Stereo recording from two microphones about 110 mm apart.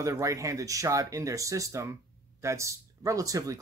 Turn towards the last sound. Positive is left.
turn(degrees=-30)  # may be behind; listen again after turning